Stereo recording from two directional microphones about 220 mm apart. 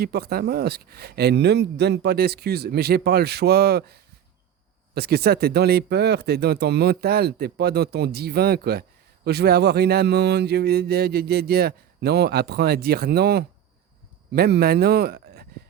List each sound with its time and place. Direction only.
0.0 s speech: 45° right (ahead or behind)